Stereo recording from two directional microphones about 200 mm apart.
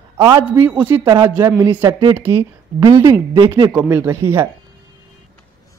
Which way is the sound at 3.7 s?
10° right (ahead or behind).